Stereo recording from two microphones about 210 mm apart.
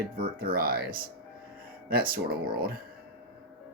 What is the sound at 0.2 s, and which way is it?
Speech, 45° right (ahead or behind).